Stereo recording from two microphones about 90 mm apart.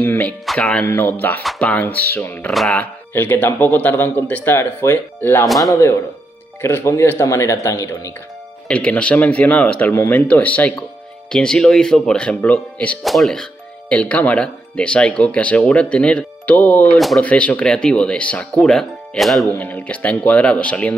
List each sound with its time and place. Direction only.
0.0 s speech: 25° left (ahead or behind)
0.5 s speech: 5° left (ahead or behind)
0.8 s speech: 25° left (ahead or behind)
2.5 s speech: centre (ahead or behind)
2.8 s speech: 20° left (ahead or behind)
5.6 s speech: 35° left (ahead or behind)
8.6 s speech: 15° left (ahead or behind)
13.0 s speech: centre (ahead or behind)
19.6 s speech: 15° left (ahead or behind)